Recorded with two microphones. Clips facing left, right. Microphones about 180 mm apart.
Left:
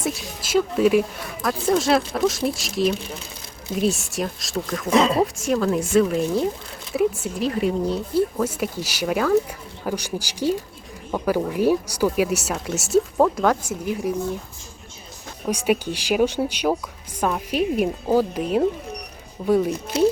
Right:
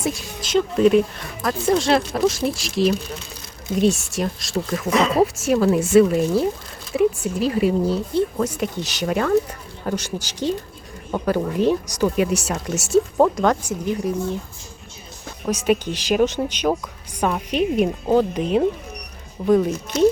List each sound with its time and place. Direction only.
0.0 s speech: 5° left (ahead or behind)
4.9 s speech: 25° left (ahead or behind)
5.2 s speech: 5° right (ahead or behind)
15.4 s speech: 10° left (ahead or behind)